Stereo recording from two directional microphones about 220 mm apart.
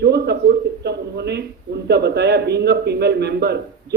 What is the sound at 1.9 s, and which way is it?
A man's voice, 50° right (ahead or behind).